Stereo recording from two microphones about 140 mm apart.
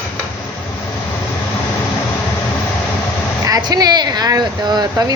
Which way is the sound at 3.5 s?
30° right (ahead or behind).